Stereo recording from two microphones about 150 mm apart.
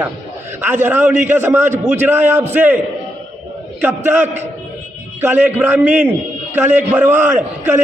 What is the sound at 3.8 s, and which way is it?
A man's voice, 15° right (ahead or behind).